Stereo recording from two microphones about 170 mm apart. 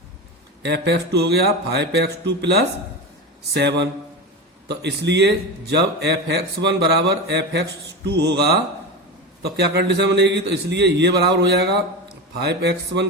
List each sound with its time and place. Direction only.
0.6 s a man's voice: 85° right